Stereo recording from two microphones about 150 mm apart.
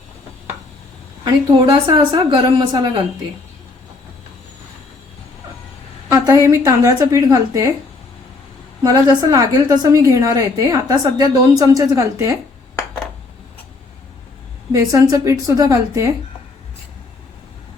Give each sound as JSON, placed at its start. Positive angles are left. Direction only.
{"t": 1.2, "sound": "a woman's voice", "side_deg": -30}
{"t": 6.4, "sound": "a woman's voice", "side_deg": -20}
{"t": 8.8, "sound": "a woman's voice", "side_deg": -25}
{"t": 14.7, "sound": "a woman's voice", "side_deg": -20}